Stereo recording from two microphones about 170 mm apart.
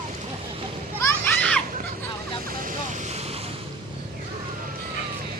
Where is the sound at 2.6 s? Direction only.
45° right (ahead or behind).